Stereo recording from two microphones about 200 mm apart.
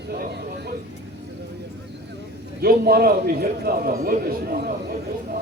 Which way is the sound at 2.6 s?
50° right (ahead or behind).